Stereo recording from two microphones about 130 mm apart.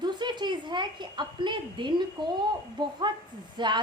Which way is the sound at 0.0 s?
35° right (ahead or behind).